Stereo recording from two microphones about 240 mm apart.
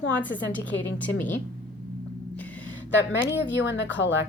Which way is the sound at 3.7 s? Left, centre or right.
Left.